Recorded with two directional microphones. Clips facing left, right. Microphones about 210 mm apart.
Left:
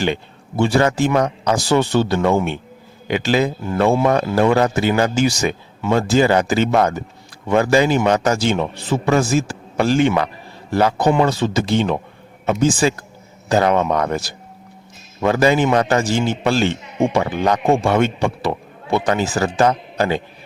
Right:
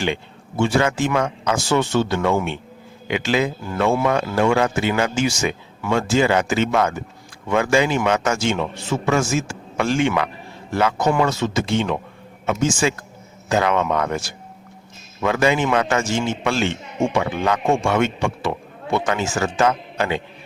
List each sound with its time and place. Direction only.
0.0 s a man's voice: 40° left (ahead or behind)